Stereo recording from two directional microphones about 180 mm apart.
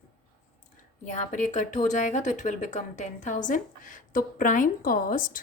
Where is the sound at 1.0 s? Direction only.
45° left (ahead or behind).